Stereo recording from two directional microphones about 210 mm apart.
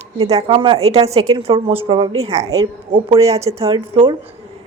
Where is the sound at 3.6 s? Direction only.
25° right (ahead or behind).